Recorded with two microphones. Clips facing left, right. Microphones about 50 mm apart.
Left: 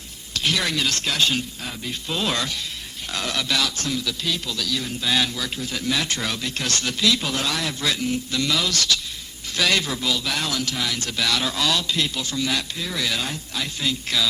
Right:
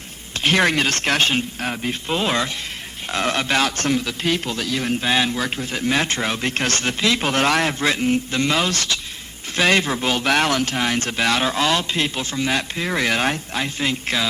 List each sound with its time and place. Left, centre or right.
0.3 s a man's voice: right